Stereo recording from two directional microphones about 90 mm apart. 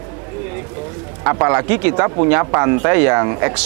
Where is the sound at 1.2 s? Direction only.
20° right (ahead or behind).